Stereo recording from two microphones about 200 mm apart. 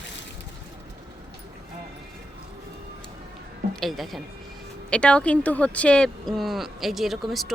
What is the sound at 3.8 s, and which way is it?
Speech, centre (ahead or behind).